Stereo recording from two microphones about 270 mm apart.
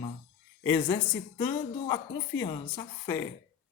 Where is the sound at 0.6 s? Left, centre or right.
Centre.